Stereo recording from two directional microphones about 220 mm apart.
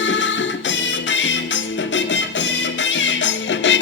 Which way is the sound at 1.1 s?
55° left (ahead or behind).